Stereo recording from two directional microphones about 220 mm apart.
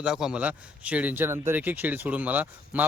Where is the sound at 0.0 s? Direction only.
5° right (ahead or behind).